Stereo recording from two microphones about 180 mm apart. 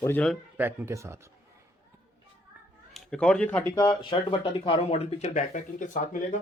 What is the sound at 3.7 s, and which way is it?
Speech, 20° left (ahead or behind).